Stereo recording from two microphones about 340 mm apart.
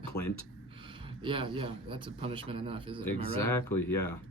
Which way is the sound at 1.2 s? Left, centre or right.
Centre.